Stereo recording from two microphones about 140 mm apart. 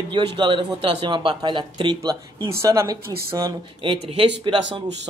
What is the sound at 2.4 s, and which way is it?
Speech, 20° right (ahead or behind).